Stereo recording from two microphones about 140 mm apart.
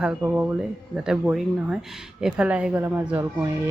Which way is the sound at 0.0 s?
5° right (ahead or behind).